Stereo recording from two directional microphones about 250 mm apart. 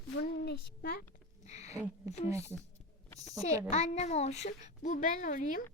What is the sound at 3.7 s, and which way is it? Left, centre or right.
A child's voice, left.